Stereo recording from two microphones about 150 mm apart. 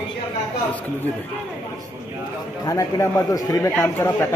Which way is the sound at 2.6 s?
20° left (ahead or behind).